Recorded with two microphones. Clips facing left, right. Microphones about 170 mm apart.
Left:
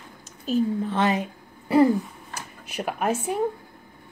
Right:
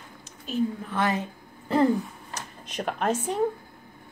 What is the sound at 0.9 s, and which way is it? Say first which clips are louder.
Speech: left 3 dB; 20° left (ahead or behind).